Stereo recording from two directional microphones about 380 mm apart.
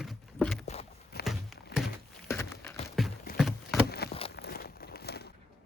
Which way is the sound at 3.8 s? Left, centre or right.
Left.